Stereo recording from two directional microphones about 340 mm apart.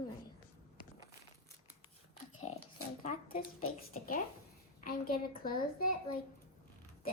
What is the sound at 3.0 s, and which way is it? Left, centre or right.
Speech, left.